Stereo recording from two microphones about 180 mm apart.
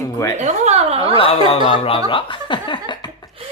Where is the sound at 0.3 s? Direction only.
40° right (ahead or behind).